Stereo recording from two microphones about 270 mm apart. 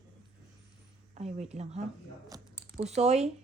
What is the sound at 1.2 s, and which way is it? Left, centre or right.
Speech, right.